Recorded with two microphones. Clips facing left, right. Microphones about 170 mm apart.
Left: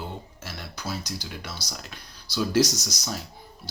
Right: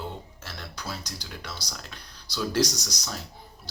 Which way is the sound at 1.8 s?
10° left (ahead or behind).